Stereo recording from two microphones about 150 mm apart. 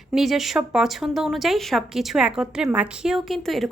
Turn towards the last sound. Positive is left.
turn(degrees=0)  # may be behind; listen again after turning